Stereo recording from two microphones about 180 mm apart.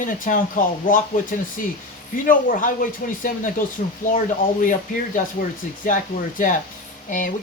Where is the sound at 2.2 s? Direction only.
50° left (ahead or behind).